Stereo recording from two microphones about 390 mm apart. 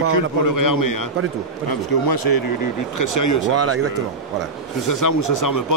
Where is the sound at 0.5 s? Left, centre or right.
Left.